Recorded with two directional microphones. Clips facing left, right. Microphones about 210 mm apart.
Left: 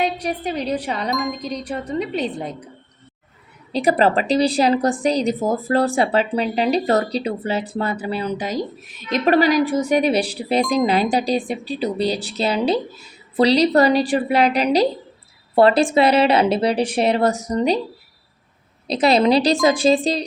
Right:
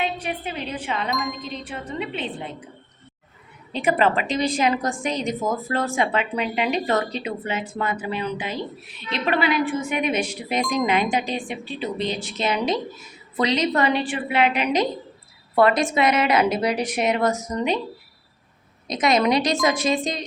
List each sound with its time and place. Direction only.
0.0 s a woman's voice: 40° left (ahead or behind)
1.1 s wind chime: centre (ahead or behind)
1.4 s a woman's voice: 40° left (ahead or behind)
3.7 s a woman's voice: 35° left (ahead or behind)
18.9 s a woman's voice: 30° left (ahead or behind)